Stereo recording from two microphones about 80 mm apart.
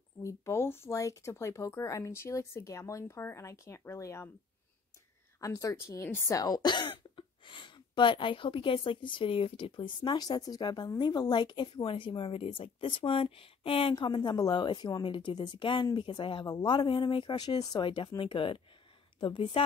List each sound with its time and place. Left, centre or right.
0.2 s speech: left
5.4 s speech: left
6.3 s a woman's voice: left